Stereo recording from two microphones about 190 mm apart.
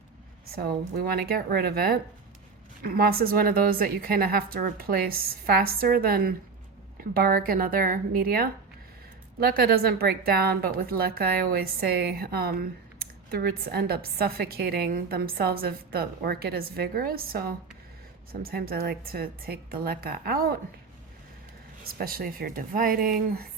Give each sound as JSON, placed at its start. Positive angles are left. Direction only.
{"t": 0.5, "sound": "speech", "side_deg": -55}
{"t": 21.9, "sound": "speech", "side_deg": -50}